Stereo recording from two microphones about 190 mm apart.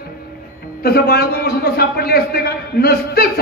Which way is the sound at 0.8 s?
55° left (ahead or behind).